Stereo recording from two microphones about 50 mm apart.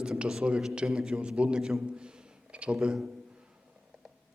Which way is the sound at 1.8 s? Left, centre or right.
Centre.